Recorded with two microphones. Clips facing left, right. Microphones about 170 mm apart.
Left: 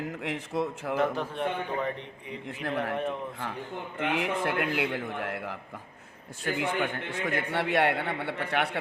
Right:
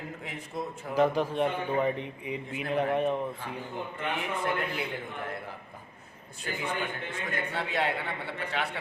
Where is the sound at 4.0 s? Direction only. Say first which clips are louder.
Left 5 dB; 90° left.